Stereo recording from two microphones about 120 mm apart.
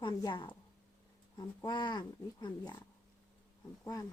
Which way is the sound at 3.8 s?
30° left (ahead or behind).